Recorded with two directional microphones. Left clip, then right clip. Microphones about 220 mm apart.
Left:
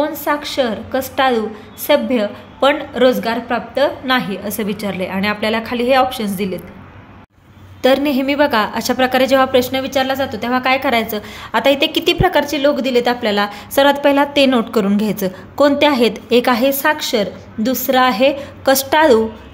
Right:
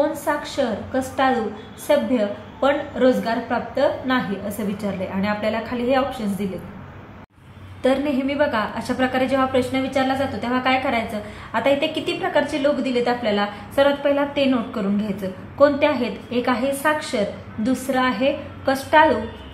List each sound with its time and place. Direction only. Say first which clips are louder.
0.0 s a woman's voice: left 4 dB; 40° left (ahead or behind)
7.8 s a woman's voice: left 6 dB; 45° left (ahead or behind)